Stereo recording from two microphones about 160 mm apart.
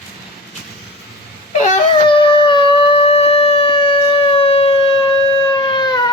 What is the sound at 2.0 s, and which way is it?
Howl, 35° left (ahead or behind).